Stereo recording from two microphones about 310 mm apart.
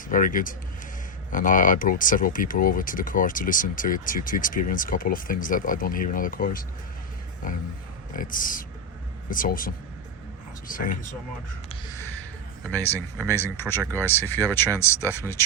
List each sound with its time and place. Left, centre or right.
0.1 s speech: left
8.1 s speech: left
12.7 s speech: centre